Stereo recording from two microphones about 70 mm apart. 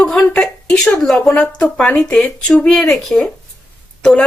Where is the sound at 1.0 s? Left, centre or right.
Centre.